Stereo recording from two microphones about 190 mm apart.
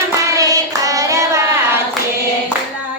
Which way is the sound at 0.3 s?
20° right (ahead or behind).